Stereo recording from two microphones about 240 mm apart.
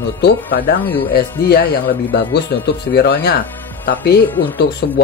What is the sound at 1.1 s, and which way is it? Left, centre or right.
Speech, left.